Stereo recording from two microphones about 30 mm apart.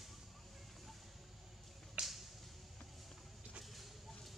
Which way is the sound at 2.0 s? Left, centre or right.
Right.